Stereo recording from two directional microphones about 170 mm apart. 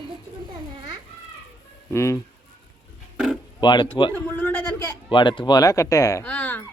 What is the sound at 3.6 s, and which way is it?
Speech, 25° left (ahead or behind).